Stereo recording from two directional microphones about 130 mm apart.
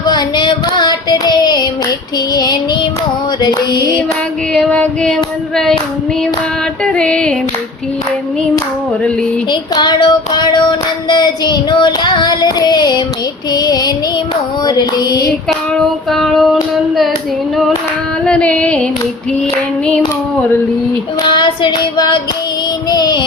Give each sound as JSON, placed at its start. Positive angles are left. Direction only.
{"t": 0.0, "sound": "carnatic music", "side_deg": 30}
{"t": 2.3, "sound": "child singing", "side_deg": 30}
{"t": 4.5, "sound": "child singing", "side_deg": 5}
{"t": 6.8, "sound": "music", "side_deg": 10}
{"t": 9.5, "sound": "child singing", "side_deg": 35}
{"t": 15.7, "sound": "child singing", "side_deg": 0}
{"t": 18.3, "sound": "music", "side_deg": 10}
{"t": 21.3, "sound": "child singing", "side_deg": 35}